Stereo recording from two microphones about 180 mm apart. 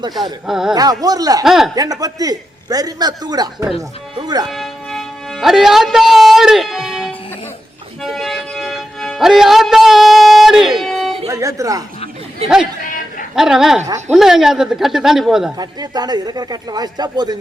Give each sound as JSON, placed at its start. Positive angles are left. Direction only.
{"t": 0.4, "sound": "speech", "side_deg": 0}
{"t": 0.7, "sound": "a man's voice", "side_deg": -20}
{"t": 1.5, "sound": "speech", "side_deg": 0}
{"t": 1.7, "sound": "a man's voice", "side_deg": -20}
{"t": 4.4, "sound": "speech", "side_deg": 0}
{"t": 8.0, "sound": "music", "side_deg": 0}
{"t": 11.3, "sound": "speech", "side_deg": -20}
{"t": 13.3, "sound": "speech", "side_deg": 0}
{"t": 15.5, "sound": "a man's voice", "side_deg": -20}